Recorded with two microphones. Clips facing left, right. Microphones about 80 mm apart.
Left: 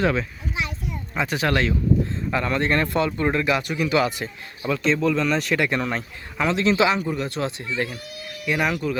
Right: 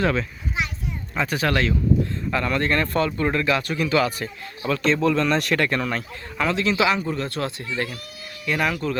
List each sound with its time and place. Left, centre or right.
0.0 s speech: centre
4.6 s speech: centre
5.5 s speech: centre
6.6 s speech: left; by 9.0 s centre